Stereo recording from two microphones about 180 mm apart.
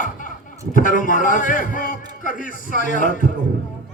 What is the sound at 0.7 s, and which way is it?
Speech, 50° left (ahead or behind).